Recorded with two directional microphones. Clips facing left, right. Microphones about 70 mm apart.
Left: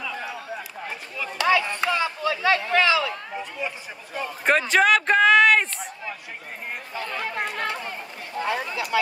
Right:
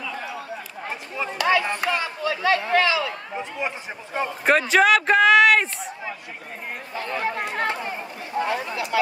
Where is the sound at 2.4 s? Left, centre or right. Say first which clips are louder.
Right 1 dB; right.